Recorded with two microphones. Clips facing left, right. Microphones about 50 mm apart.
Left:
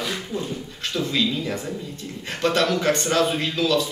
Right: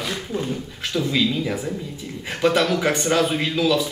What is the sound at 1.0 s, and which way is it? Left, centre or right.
Speech, centre.